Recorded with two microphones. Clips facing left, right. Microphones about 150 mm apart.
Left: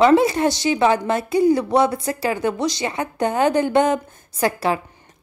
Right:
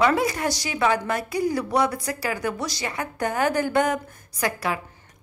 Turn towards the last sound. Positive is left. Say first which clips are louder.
# left 6 dB
turn(degrees=30)  # may be behind; listen again after turning